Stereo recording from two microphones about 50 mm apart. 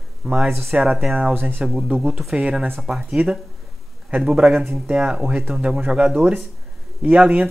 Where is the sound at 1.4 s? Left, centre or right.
Right.